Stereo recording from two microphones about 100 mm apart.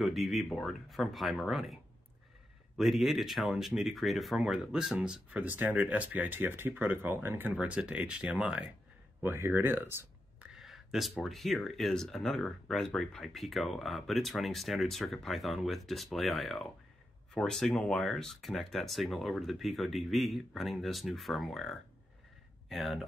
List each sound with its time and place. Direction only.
0.0 s speech: centre (ahead or behind)
2.8 s speech: centre (ahead or behind)
9.2 s speech: 20° right (ahead or behind)
10.4 s a sound: 5° right (ahead or behind)
11.2 s speech: centre (ahead or behind)